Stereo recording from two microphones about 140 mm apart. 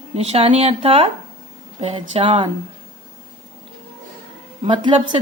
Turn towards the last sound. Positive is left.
turn(degrees=-35)  # may be behind; listen again after turning